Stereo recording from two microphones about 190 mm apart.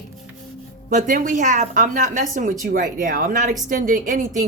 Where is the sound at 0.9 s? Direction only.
45° right (ahead or behind).